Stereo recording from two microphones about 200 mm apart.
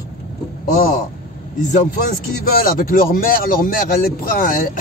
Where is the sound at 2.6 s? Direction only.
45° left (ahead or behind).